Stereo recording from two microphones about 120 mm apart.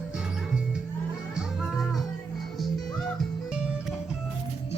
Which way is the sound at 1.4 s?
5° right (ahead or behind).